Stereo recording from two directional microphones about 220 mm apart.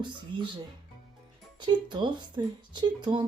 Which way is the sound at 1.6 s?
20° right (ahead or behind).